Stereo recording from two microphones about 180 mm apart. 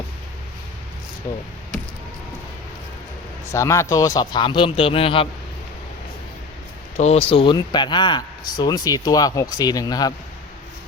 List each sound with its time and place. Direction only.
3.5 s speech: 15° left (ahead or behind); by 5.3 s 30° left (ahead or behind)
6.9 s speech: 35° left (ahead or behind); by 10.1 s 20° left (ahead or behind)